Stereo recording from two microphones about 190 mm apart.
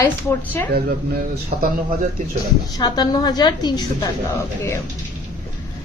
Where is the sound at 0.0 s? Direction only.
10° left (ahead or behind).